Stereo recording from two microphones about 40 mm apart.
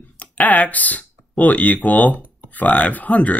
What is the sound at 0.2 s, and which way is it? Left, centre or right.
Speech, left.